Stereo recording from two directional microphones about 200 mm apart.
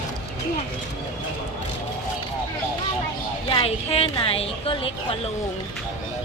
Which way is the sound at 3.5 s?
30° left (ahead or behind).